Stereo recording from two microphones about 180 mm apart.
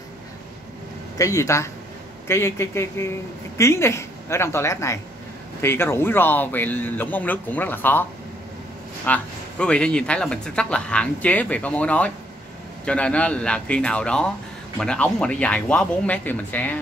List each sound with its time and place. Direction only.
1.1 s speech: 15° left (ahead or behind)